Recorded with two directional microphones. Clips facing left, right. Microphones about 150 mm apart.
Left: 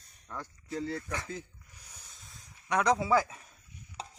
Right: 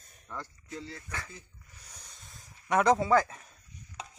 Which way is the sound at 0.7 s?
45° left (ahead or behind).